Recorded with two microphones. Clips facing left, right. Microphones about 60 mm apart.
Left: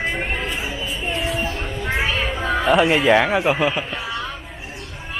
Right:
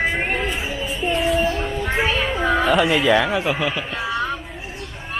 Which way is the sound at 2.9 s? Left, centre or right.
Centre.